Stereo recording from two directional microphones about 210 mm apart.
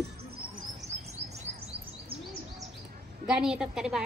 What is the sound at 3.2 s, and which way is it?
Speech, 5° right (ahead or behind).